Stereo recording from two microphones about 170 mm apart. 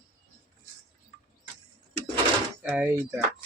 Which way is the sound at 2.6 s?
10° right (ahead or behind).